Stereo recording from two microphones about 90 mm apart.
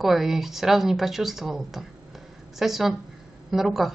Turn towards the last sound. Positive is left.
turn(degrees=0)  # may be behind; listen again after turning